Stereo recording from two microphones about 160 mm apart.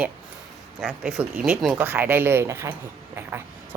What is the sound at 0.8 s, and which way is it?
A woman's voice, 5° right (ahead or behind).